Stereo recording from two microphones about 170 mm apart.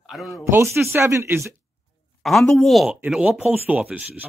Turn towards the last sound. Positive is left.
turn(degrees=-10)  # may be behind; listen again after turning